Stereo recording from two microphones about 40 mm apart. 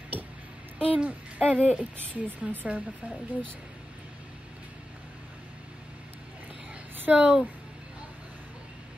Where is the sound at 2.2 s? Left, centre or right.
Right.